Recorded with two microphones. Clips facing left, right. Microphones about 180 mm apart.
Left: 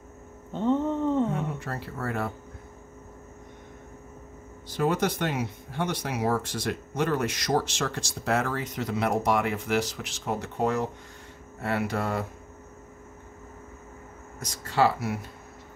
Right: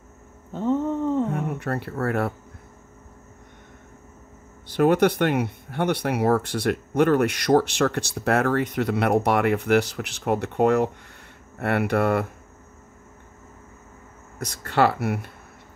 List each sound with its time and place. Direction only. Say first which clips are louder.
0.5 s a sound: right 2 dB; 5° right (ahead or behind)
1.3 s speech: right 5 dB; 60° right (ahead or behind)
4.6 s speech: right 7 dB; 65° right (ahead or behind)
14.4 s speech: right 3 dB; 60° right (ahead or behind)